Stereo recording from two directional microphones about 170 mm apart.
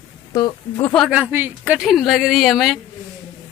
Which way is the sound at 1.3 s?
10° right (ahead or behind).